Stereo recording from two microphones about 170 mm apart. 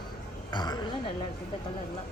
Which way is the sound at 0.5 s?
25° left (ahead or behind).